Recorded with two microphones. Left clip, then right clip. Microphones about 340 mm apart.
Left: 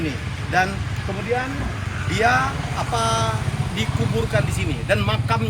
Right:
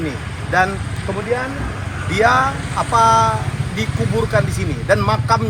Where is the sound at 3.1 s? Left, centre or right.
Centre.